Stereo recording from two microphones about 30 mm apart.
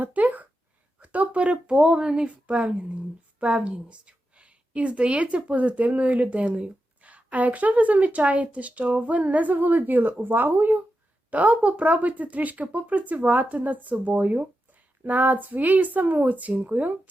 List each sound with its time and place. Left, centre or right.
0.0 s a sound: right
0.9 s a woman's voice: right
11.3 s speech: right
16.5 s speech: right